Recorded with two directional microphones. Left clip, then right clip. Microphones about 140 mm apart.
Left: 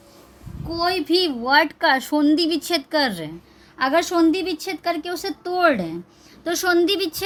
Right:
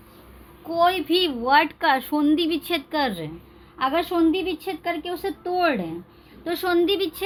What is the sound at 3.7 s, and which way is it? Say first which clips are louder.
A woman's voice: left 3 dB; 45° left (ahead or behind).